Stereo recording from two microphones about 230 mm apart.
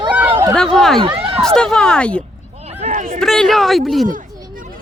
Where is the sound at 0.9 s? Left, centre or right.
Right.